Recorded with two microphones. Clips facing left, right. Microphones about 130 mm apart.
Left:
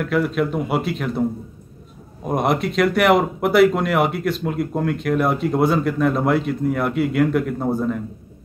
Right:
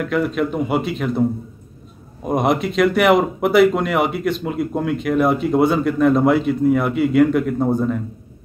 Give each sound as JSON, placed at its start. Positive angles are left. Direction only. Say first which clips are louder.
{"t": 0.0, "sound": "speech", "louder": "even", "side_deg": 0}
{"t": 2.2, "sound": "speech", "louder": "right 2 dB", "side_deg": 0}